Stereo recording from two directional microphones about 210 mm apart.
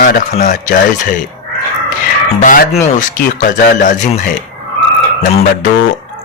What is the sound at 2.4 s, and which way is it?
Speech, 35° left (ahead or behind).